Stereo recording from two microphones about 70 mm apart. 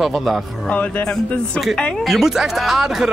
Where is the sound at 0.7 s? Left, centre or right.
Left.